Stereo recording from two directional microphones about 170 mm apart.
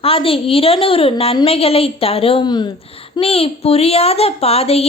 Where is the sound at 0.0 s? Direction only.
35° left (ahead or behind).